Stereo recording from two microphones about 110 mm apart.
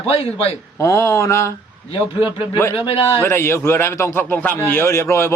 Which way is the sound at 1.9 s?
45° left (ahead or behind).